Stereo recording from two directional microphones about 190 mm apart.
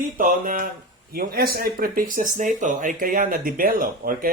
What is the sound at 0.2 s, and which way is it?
Speech, 45° right (ahead or behind).